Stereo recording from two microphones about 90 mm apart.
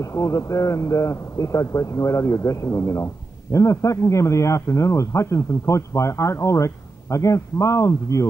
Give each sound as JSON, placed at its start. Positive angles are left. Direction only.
{"t": 0.0, "sound": "a man's voice", "side_deg": 35}